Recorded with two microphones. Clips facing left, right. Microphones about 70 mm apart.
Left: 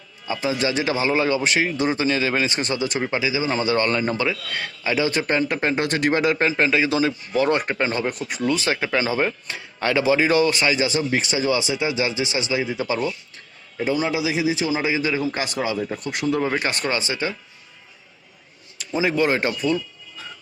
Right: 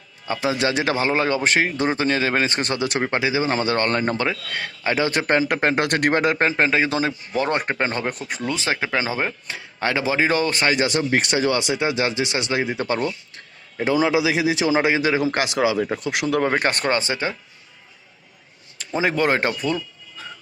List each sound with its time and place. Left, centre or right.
0.4 s speech: right
6.6 s speech: right
13.8 s a man's voice: right
16.4 s speech: right
18.8 s speech: right